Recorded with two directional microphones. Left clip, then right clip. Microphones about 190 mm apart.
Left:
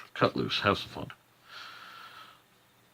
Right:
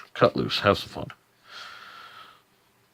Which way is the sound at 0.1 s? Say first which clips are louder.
Right 6 dB; 45° right (ahead or behind).